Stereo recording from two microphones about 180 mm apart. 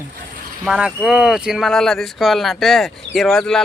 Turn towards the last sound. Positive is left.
turn(degrees=5)  # may be behind; listen again after turning